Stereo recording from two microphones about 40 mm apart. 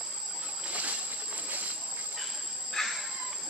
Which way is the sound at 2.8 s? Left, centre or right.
Centre.